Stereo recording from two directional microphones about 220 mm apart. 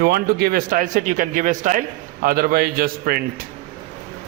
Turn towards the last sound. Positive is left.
turn(degrees=-40)  # may be behind; listen again after turning